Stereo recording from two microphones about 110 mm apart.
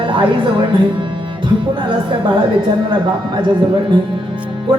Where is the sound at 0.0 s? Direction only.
50° right (ahead or behind).